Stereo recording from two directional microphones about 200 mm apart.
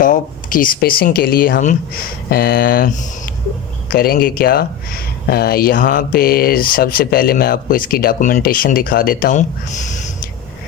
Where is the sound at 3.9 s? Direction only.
50° left (ahead or behind).